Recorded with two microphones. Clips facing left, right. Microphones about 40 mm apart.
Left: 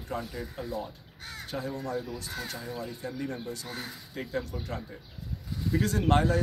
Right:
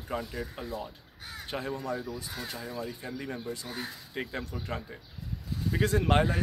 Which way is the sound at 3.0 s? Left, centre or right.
Centre.